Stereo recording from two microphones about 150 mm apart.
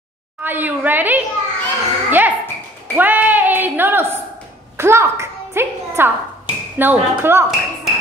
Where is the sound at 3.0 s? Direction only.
10° right (ahead or behind).